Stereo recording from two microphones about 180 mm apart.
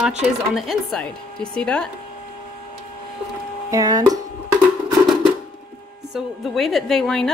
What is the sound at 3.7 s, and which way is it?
Speech, 20° right (ahead or behind).